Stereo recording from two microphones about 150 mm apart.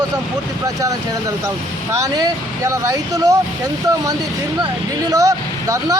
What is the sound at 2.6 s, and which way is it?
Speech, 20° right (ahead or behind).